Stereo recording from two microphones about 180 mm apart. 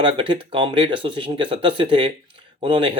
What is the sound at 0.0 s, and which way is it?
Speech, 30° right (ahead or behind).